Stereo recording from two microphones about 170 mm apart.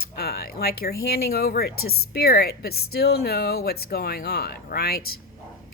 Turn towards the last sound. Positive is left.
turn(degrees=65)  # may be behind; listen again after turning